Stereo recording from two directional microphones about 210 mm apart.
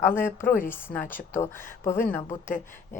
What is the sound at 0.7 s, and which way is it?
Speech, 10° left (ahead or behind).